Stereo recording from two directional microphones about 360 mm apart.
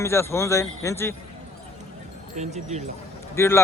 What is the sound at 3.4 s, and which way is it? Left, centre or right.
Speech, centre.